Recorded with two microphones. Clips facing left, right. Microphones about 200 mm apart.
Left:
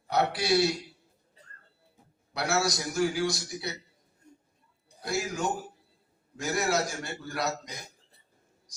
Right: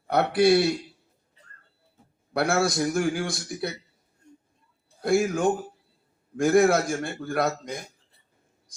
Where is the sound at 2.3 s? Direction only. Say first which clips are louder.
Right 5 dB; 55° right (ahead or behind).